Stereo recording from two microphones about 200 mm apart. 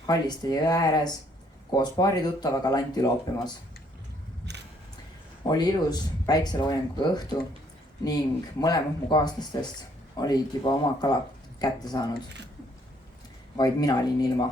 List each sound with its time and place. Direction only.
0.1 s speech: 20° left (ahead or behind)
5.4 s speech: 20° left (ahead or behind)
8.6 s speech: 20° left (ahead or behind)
13.6 s speech: 20° left (ahead or behind)